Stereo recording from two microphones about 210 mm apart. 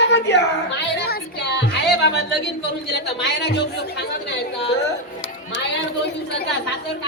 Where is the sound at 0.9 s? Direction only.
50° left (ahead or behind).